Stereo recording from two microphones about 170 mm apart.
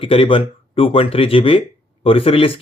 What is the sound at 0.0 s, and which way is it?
Speech, 30° left (ahead or behind).